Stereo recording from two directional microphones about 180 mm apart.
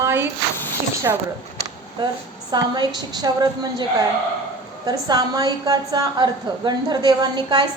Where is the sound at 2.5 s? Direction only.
20° right (ahead or behind).